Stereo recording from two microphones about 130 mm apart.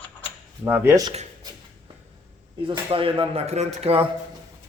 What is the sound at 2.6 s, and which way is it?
Speech, 40° right (ahead or behind).